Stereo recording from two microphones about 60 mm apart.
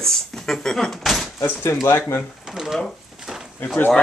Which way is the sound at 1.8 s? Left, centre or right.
Left.